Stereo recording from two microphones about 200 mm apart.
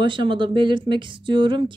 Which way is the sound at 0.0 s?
25° right (ahead or behind).